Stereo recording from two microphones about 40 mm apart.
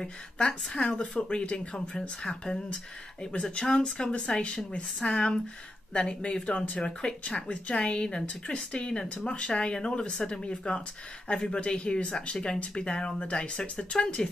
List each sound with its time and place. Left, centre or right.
0.8 s speech: left
2.0 s speech: centre
4.4 s speech: left